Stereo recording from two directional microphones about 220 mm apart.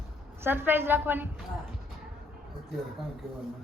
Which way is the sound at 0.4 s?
10° right (ahead or behind).